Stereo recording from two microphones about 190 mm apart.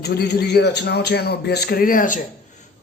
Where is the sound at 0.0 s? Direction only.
60° left (ahead or behind).